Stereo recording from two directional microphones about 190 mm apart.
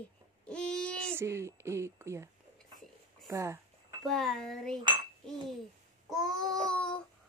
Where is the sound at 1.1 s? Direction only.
15° right (ahead or behind).